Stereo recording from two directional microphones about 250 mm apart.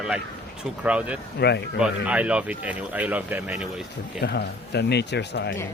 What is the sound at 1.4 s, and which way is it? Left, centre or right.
Speech, left.